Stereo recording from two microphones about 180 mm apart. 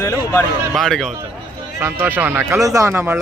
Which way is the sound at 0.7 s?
Centre (ahead or behind).